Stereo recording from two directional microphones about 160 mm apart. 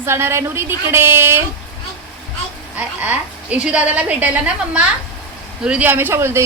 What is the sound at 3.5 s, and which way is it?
Speech, 10° right (ahead or behind).